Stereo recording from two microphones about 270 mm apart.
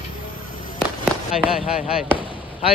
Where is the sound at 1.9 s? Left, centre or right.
Centre.